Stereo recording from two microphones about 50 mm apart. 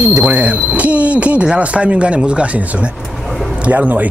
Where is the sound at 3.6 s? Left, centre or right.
Right.